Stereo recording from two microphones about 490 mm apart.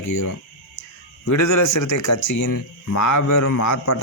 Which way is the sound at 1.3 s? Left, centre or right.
Left.